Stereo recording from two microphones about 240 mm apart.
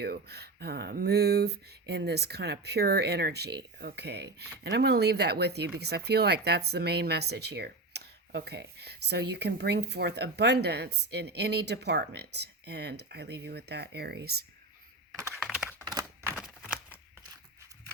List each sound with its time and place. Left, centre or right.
0.0 s speech: right
15.1 s computer keyboard: centre
15.9 s a sound: centre